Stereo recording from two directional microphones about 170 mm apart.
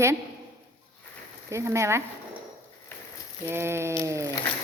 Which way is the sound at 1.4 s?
15° right (ahead or behind).